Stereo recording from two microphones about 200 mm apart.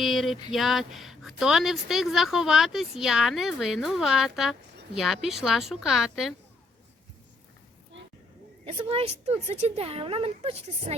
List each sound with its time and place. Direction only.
0.0 s speech: centre (ahead or behind)
8.6 s a woman's voice: 30° right (ahead or behind)